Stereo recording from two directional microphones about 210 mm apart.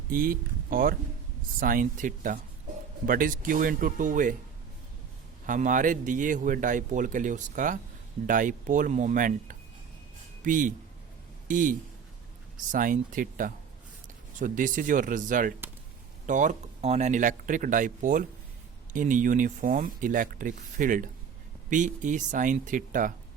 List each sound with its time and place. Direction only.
0.1 s speech: 40° right (ahead or behind)
5.5 s speech: 40° right (ahead or behind)